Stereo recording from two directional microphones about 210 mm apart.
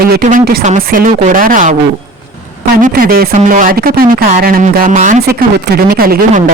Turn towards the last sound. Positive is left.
turn(degrees=-45)  # may be behind; listen again after turning